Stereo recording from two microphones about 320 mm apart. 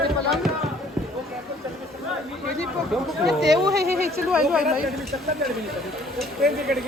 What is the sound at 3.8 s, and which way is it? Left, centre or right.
Speech, right.